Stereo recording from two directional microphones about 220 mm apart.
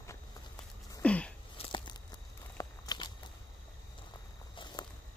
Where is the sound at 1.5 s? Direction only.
25° left (ahead or behind).